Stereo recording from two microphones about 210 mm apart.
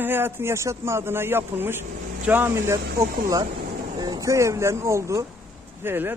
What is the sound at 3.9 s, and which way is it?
A man's voice, 20° right (ahead or behind).